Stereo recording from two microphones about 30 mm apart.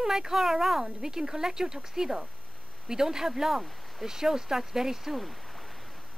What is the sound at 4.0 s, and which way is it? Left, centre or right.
Speech, centre.